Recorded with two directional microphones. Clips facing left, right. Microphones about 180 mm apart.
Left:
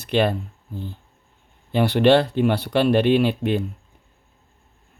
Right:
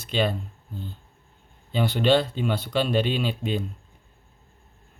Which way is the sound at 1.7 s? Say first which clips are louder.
Left 5 dB; 65° left (ahead or behind).